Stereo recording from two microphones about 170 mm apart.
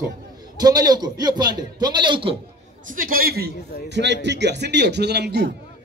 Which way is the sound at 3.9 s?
90° right.